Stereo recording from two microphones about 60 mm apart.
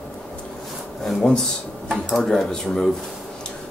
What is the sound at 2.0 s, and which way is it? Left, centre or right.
Speech, centre.